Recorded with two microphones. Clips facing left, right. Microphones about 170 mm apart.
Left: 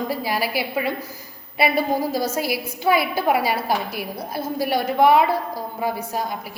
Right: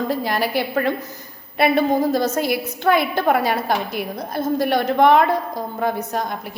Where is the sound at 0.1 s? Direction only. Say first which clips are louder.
Right 3 dB; 5° left (ahead or behind).